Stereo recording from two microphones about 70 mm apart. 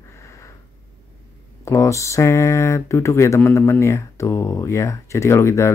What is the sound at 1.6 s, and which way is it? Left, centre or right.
Speech, left.